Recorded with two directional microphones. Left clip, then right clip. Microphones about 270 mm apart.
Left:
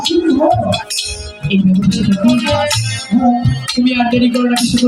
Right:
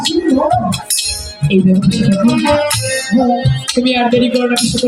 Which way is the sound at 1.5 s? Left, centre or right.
Right.